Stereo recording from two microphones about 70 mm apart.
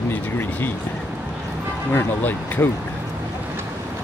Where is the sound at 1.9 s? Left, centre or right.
Left.